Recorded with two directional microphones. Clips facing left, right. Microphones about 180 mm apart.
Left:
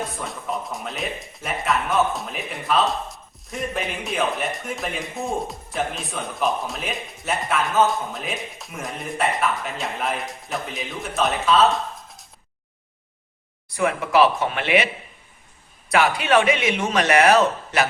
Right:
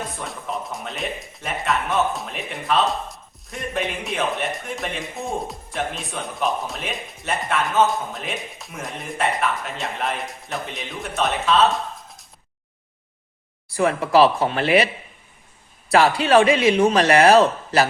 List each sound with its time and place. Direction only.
0.3 s speech: centre (ahead or behind)
13.7 s speech: 35° right (ahead or behind)
15.9 s speech: 35° right (ahead or behind)